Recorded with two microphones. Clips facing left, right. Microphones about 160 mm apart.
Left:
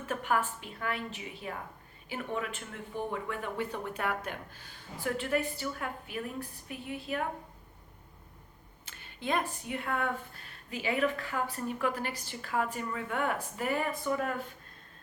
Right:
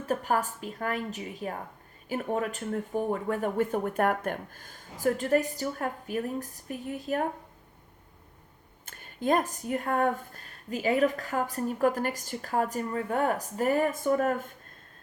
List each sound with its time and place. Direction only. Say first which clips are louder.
0.0 s a woman's voice: right 3 dB; 40° right (ahead or behind)
8.9 s a woman's voice: right 7 dB; 45° right (ahead or behind)